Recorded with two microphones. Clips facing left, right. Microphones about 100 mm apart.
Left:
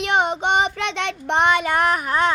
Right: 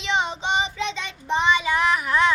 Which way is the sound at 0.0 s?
55° left (ahead or behind).